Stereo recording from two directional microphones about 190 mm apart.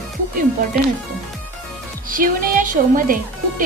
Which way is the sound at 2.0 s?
45° right (ahead or behind).